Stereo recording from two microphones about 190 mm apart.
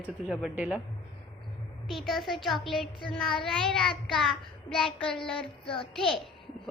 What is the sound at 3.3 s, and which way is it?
A woman's voice, centre (ahead or behind).